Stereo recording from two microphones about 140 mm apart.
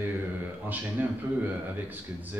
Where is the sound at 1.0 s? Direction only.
10° right (ahead or behind).